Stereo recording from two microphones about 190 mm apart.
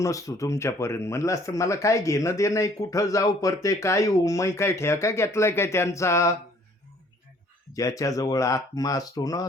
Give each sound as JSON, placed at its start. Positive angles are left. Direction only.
{"t": 0.0, "sound": "speech", "side_deg": 15}
{"t": 7.7, "sound": "speech", "side_deg": 15}